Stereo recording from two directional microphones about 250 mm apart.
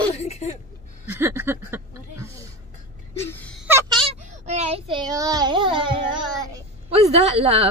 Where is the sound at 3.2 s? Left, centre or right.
Centre.